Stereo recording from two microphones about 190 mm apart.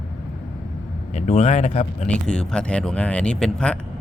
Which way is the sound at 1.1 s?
40° left (ahead or behind).